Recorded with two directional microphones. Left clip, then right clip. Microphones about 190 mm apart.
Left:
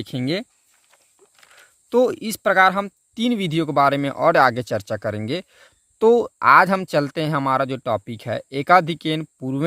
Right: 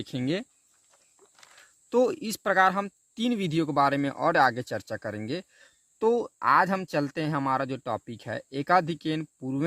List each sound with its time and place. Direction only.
0.0 s speech: 30° left (ahead or behind)